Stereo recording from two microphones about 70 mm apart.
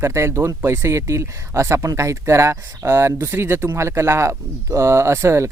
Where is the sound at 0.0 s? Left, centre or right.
Right.